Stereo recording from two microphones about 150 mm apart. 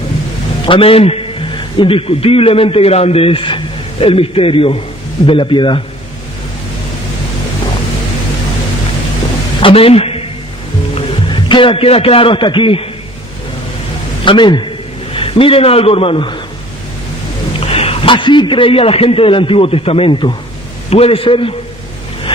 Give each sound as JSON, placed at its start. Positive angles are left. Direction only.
{"t": 0.6, "sound": "a man's voice", "side_deg": 35}
{"t": 9.6, "sound": "a sound", "side_deg": 40}
{"t": 10.9, "sound": "a man's voice", "side_deg": 35}
{"t": 14.3, "sound": "a man's voice", "side_deg": 30}
{"t": 17.5, "sound": "a man's voice", "side_deg": 40}